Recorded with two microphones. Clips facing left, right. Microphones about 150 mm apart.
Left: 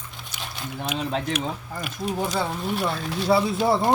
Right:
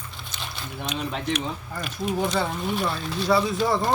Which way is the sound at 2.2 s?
5° left (ahead or behind).